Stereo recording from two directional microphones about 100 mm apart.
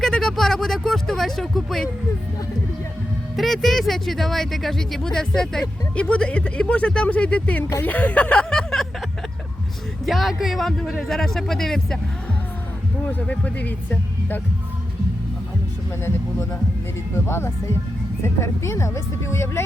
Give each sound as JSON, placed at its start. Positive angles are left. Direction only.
{"t": 0.0, "sound": "vehicle", "side_deg": 5}
{"t": 3.3, "sound": "speech", "side_deg": 0}
{"t": 10.1, "sound": "speech", "side_deg": 0}
{"t": 13.1, "sound": "speech", "side_deg": 15}
{"t": 17.2, "sound": "speech", "side_deg": 25}